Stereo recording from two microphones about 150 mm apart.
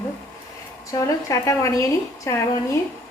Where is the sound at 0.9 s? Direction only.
20° left (ahead or behind).